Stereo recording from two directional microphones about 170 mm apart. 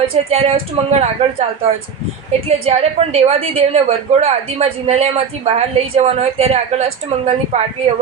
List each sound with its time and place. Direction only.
0.1 s a woman's voice: 35° right (ahead or behind)
2.5 s a woman's voice: 35° right (ahead or behind)